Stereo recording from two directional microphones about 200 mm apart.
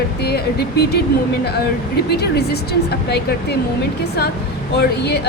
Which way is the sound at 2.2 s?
55° left (ahead or behind).